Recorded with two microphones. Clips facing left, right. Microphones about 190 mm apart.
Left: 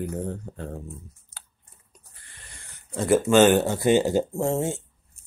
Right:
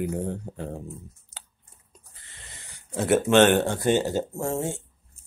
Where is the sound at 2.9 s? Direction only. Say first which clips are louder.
Left 1 dB; centre (ahead or behind).